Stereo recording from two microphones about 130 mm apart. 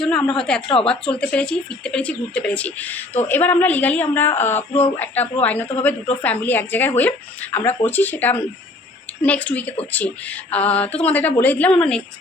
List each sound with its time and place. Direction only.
0.0 s a woman's voice: 5° left (ahead or behind)